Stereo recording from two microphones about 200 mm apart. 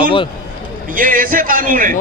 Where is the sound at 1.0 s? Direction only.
45° right (ahead or behind).